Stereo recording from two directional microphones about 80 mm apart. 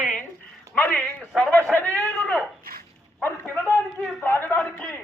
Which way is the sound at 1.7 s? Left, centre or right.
Centre.